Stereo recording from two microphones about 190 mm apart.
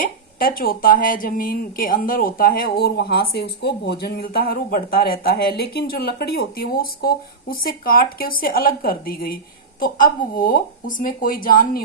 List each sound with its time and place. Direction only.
0.0 s a woman's voice: 50° left (ahead or behind)